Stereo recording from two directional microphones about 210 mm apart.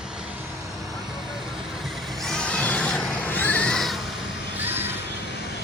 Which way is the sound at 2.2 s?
5° left (ahead or behind).